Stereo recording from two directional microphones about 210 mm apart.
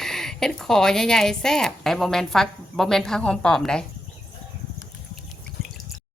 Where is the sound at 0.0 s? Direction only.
Centre (ahead or behind).